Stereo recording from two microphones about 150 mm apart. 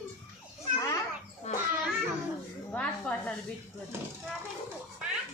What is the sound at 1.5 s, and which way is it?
Children playing, 50° left (ahead or behind).